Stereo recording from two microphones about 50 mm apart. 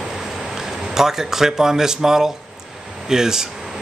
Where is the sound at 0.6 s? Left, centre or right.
Centre.